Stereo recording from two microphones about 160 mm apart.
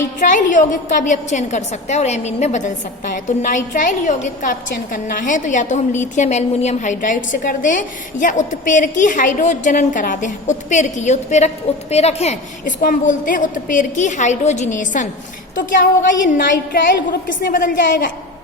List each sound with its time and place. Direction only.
0.2 s a woman's voice: 55° left (ahead or behind)
4.7 s a woman's voice: 65° left (ahead or behind)